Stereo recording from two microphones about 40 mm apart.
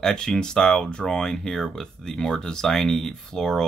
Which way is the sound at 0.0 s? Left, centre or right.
Centre.